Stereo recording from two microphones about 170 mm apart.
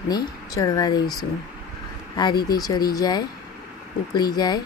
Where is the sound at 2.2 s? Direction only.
25° left (ahead or behind).